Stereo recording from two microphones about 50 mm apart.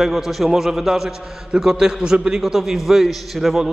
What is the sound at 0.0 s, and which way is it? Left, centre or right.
A man's voice, centre.